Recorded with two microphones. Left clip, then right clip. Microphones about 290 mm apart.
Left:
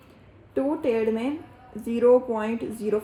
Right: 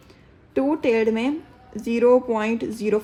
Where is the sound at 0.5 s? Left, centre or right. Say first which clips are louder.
Right 4 dB; right.